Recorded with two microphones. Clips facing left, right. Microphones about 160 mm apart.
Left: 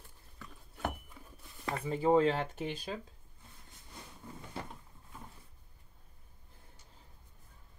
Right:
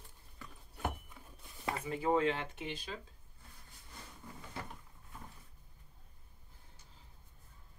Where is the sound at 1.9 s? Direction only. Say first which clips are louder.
Left 5 dB; 30° left (ahead or behind).